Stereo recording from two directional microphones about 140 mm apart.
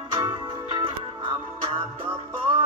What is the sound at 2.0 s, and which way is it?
Music, 45° right (ahead or behind).